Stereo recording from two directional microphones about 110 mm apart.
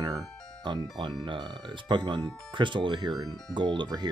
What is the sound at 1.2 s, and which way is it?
Speech, 45° right (ahead or behind).